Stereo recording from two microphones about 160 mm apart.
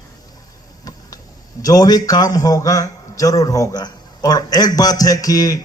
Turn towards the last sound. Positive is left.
turn(degrees=20)  # may be behind; listen again after turning